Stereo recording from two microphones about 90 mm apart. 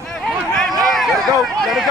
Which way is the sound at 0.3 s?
5° left (ahead or behind).